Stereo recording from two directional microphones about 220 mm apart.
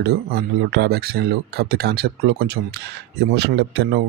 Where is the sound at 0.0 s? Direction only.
45° right (ahead or behind).